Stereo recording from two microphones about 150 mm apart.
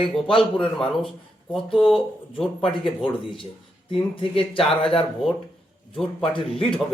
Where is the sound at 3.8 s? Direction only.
35° left (ahead or behind).